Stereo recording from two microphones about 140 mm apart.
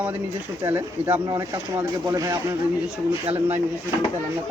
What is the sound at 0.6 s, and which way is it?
Speech, 15° right (ahead or behind).